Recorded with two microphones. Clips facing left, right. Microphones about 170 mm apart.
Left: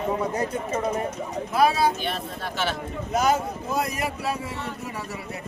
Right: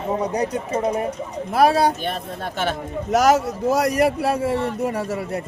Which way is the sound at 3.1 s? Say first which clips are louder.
Right 6 dB; 80° right.